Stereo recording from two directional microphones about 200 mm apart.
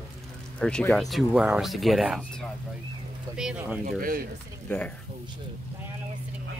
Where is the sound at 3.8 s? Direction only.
45° right (ahead or behind).